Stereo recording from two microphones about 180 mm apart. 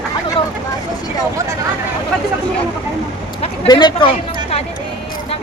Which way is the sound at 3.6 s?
25° left (ahead or behind).